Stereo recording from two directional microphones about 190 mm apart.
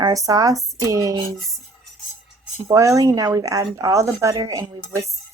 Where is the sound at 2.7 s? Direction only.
15° right (ahead or behind).